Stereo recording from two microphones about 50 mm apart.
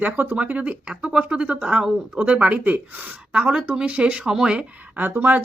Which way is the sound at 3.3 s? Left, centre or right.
Right.